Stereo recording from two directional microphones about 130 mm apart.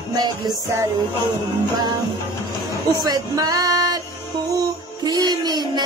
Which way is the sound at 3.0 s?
30° right (ahead or behind).